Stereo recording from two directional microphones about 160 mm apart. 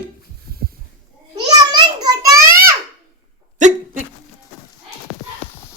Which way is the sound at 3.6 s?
50° right (ahead or behind).